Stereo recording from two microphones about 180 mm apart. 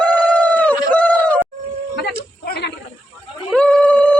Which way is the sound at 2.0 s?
65° left (ahead or behind).